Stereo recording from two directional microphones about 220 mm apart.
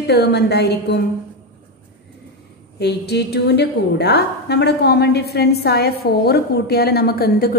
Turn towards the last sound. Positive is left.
turn(degrees=45)  # may be behind; listen again after turning